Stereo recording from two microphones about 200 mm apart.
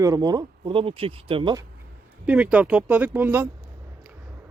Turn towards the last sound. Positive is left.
turn(degrees=-10)  # may be behind; listen again after turning